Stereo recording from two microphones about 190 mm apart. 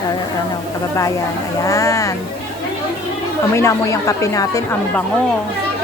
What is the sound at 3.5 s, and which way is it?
A woman's voice, 15° left (ahead or behind).